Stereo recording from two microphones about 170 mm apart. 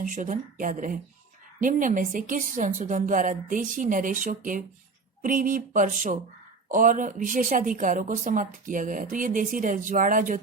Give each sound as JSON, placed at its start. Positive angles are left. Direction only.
{"t": 0.0, "sound": "a woman's voice", "side_deg": -50}